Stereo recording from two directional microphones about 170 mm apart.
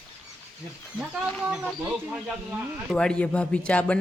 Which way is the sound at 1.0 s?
Centre (ahead or behind).